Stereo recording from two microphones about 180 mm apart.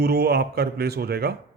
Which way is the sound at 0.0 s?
60° right (ahead or behind).